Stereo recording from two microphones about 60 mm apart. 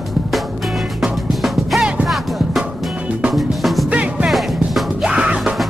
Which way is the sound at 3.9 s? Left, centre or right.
Centre.